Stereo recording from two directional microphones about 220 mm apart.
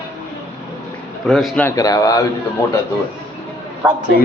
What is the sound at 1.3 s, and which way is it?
Speech, centre (ahead or behind).